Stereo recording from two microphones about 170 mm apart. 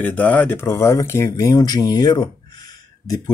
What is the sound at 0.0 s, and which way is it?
A man's voice, 10° left (ahead or behind).